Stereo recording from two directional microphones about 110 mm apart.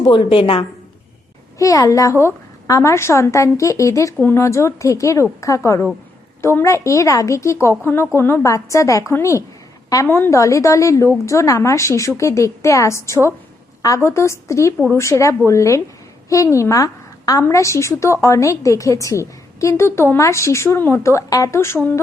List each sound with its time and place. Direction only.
0.0 s a woman's voice: 50° left (ahead or behind)
1.5 s a woman's voice: 30° left (ahead or behind)